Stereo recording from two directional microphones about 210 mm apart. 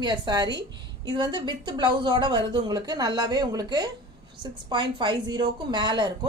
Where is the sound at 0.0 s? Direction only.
20° right (ahead or behind).